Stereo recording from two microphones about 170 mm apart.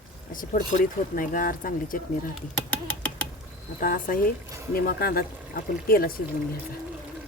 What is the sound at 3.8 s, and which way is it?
Speech, 55° left (ahead or behind).